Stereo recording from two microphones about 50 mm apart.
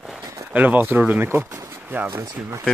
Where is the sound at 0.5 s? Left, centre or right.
Right.